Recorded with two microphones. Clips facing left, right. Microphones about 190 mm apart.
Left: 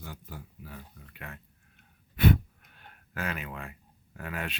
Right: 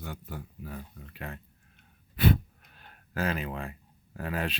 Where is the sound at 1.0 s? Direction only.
30° right (ahead or behind).